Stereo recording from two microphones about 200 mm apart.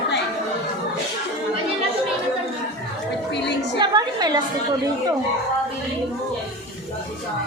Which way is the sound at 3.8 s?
20° right (ahead or behind).